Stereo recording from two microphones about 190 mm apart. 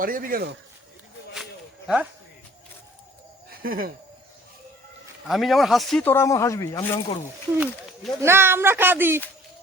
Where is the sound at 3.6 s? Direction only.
50° right (ahead or behind).